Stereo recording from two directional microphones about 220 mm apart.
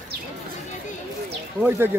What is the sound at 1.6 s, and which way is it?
Speech, 10° right (ahead or behind).